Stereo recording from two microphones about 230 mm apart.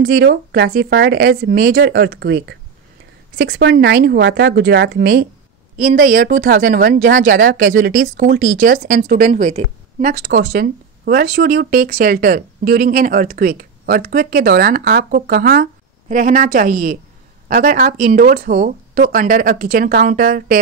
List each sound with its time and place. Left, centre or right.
0.0 s speech: right